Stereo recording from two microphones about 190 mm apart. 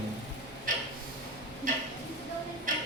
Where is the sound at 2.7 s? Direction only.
45° right (ahead or behind).